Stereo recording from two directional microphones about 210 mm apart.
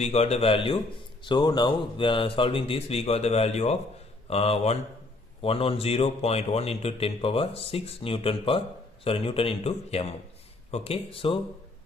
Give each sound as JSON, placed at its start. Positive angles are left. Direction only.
{"t": 0.0, "sound": "a man's voice", "side_deg": 30}